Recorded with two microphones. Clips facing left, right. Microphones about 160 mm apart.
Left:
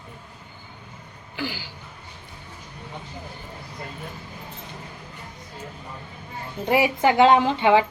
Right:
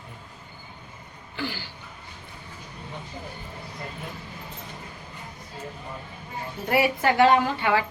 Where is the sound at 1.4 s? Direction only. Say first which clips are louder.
Left 1 dB; 15° left (ahead or behind).